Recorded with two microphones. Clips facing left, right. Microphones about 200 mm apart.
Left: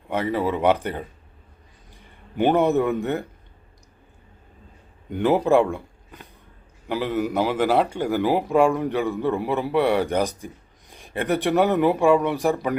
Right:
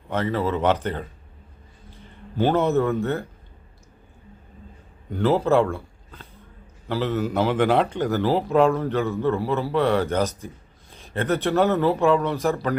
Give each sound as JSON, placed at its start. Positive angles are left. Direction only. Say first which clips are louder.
{"t": 0.1, "sound": "a man's voice", "louder": "even", "side_deg": 15}
{"t": 5.1, "sound": "a man's voice", "louder": "left 1 dB", "side_deg": 15}